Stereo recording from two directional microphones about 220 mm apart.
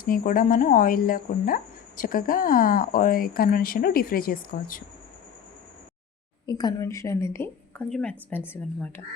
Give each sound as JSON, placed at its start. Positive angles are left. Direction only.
{"t": 0.0, "sound": "speech", "side_deg": 40}
{"t": 6.4, "sound": "a woman's voice", "side_deg": 20}